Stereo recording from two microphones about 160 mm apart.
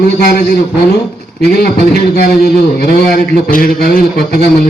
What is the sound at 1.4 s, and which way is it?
Speech, 75° left (ahead or behind).